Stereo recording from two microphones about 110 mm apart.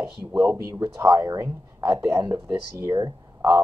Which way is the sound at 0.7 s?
35° right (ahead or behind).